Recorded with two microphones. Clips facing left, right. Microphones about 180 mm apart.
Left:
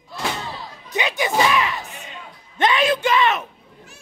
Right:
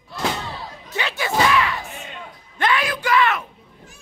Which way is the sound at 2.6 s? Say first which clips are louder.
Left 4 dB; 20° left (ahead or behind).